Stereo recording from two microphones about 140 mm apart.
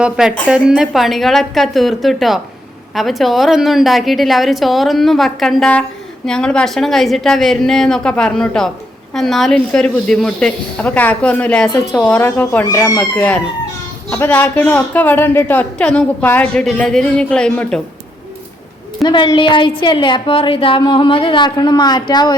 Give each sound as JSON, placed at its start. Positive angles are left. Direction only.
{"t": 0.0, "sound": "a woman's voice", "side_deg": -5}
{"t": 12.1, "sound": "speech", "side_deg": 10}
{"t": 12.6, "sound": "speech", "side_deg": 25}
{"t": 13.0, "sound": "speech", "side_deg": 10}
{"t": 19.0, "sound": "a woman's voice", "side_deg": 35}